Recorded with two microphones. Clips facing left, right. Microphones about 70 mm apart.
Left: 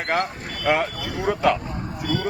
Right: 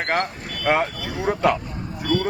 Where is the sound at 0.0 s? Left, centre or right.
Right.